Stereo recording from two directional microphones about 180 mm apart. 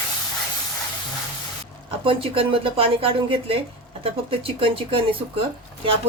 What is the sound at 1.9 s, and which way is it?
A woman's voice, 30° right (ahead or behind).